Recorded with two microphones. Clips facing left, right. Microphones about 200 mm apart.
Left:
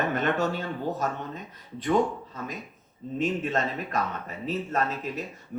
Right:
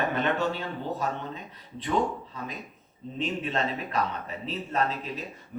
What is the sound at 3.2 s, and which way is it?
Speech, 45° left (ahead or behind).